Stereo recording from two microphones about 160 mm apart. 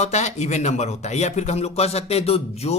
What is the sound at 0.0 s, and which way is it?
Speech, 45° left (ahead or behind).